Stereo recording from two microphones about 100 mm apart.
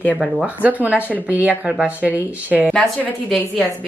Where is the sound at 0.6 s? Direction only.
15° right (ahead or behind).